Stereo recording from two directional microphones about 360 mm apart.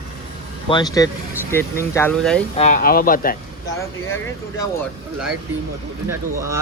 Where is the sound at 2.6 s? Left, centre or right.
Left.